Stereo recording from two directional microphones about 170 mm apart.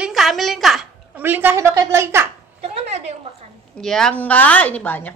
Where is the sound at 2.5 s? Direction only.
40° right (ahead or behind).